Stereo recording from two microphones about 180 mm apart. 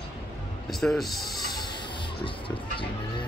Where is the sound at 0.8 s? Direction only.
Centre (ahead or behind).